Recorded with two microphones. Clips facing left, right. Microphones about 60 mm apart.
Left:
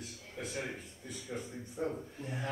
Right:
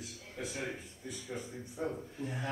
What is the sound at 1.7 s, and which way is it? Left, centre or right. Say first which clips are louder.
Speech: left 1 dB; centre.